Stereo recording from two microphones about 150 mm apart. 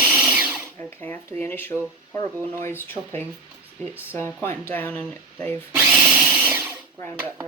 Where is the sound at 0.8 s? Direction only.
15° left (ahead or behind).